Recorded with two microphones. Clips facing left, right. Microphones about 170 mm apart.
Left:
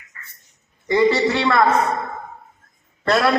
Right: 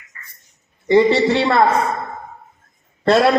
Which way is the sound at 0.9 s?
25° right (ahead or behind).